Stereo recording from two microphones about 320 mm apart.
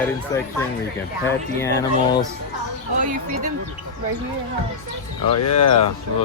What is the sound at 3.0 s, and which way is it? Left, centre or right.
Speech, right.